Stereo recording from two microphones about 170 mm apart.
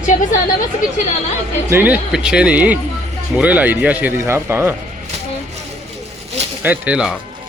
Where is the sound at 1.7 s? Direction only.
10° right (ahead or behind).